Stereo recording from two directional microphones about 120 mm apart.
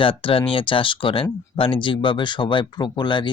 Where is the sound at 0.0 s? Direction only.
45° left (ahead or behind).